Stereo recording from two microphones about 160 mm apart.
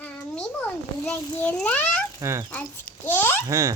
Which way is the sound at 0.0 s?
10° left (ahead or behind).